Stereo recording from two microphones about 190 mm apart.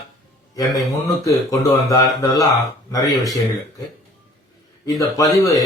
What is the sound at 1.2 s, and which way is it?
Speech, 20° left (ahead or behind).